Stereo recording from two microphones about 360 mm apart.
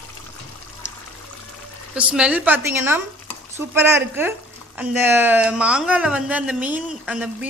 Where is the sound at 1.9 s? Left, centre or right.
Centre.